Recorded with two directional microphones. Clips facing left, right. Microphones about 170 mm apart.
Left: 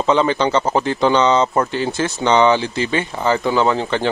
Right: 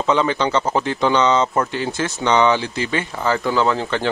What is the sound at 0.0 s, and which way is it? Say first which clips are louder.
Speech: left 2 dB; 30° left (ahead or behind).